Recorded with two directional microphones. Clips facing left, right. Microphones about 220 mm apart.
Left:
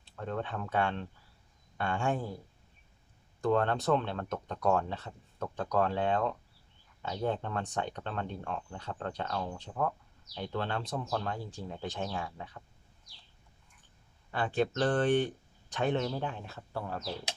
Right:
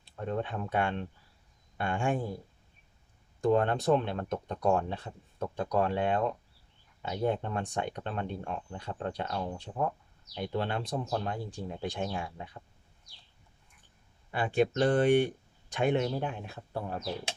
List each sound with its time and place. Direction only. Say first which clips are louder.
0.0 s speech: right 3 dB; 15° right (ahead or behind)
3.4 s speech: right 2 dB; 15° right (ahead or behind)
14.3 s speech: right 3 dB; 10° right (ahead or behind)